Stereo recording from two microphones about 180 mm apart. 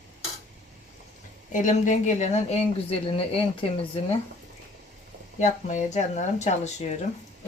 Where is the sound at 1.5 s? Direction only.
45° left (ahead or behind).